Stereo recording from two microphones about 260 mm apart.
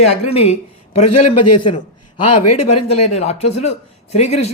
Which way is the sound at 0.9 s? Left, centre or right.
Left.